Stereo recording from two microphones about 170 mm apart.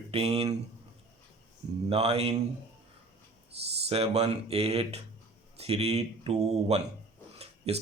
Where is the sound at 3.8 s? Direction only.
35° right (ahead or behind).